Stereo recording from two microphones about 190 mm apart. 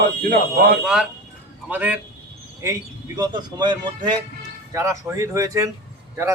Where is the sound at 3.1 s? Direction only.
20° right (ahead or behind).